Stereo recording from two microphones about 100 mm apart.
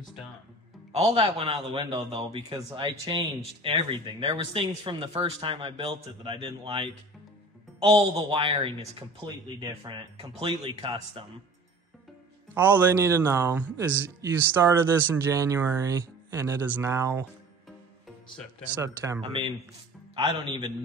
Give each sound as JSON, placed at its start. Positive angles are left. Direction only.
{"t": 0.9, "sound": "a man's voice", "side_deg": -90}
{"t": 2.5, "sound": "speech", "side_deg": -55}
{"t": 10.4, "sound": "speech", "side_deg": -70}
{"t": 12.5, "sound": "speech", "side_deg": -20}
{"t": 18.8, "sound": "speech", "side_deg": -25}
{"t": 19.2, "sound": "a man's voice", "side_deg": -65}